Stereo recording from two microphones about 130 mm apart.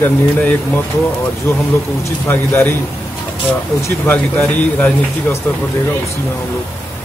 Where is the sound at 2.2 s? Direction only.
15° left (ahead or behind).